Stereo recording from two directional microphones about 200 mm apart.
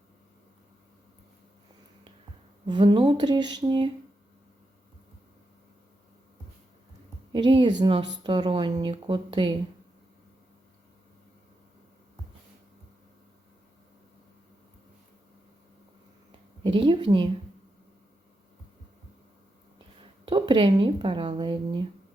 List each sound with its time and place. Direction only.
2.6 s speech: 25° right (ahead or behind)
7.3 s speech: 25° right (ahead or behind)
16.6 s speech: 25° right (ahead or behind)
20.0 s speech: 25° right (ahead or behind)